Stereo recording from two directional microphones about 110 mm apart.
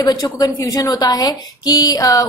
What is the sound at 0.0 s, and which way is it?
A woman's voice, 35° left (ahead or behind).